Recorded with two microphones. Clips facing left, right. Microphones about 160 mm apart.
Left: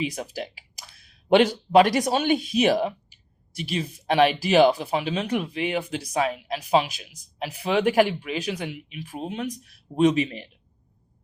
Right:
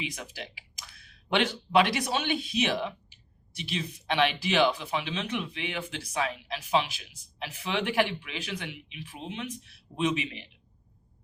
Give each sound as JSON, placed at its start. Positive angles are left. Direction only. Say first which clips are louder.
{"t": 0.0, "sound": "speech", "louder": "left 9 dB", "side_deg": 40}